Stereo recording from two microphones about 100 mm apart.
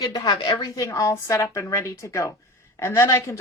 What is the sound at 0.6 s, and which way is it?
A woman's voice, 35° left (ahead or behind).